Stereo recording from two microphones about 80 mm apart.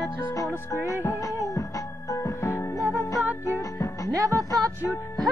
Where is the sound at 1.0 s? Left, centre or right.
Left.